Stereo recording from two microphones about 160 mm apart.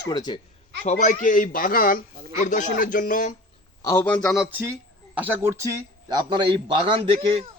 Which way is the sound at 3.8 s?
10° left (ahead or behind).